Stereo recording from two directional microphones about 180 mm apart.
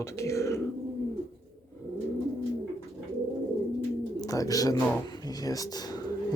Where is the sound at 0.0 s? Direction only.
15° left (ahead or behind).